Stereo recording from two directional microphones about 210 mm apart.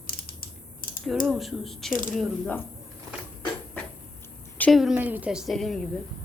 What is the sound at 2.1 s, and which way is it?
Speech, 5° left (ahead or behind).